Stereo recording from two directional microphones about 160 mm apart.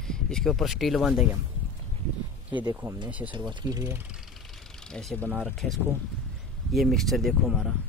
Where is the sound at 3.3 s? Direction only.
30° right (ahead or behind).